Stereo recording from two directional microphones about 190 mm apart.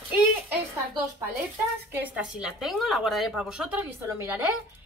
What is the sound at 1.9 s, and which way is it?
Speech, 10° right (ahead or behind).